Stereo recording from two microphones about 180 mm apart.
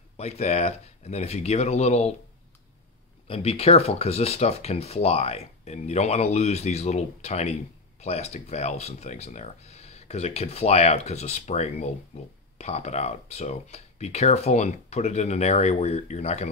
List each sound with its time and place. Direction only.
0.2 s speech: 35° left (ahead or behind)
3.3 s speech: 35° left (ahead or behind)